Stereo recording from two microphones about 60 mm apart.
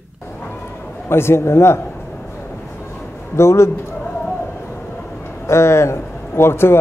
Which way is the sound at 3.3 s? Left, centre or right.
Left.